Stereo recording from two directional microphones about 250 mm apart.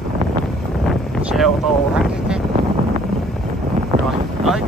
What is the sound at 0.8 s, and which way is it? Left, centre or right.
Wind noise, centre.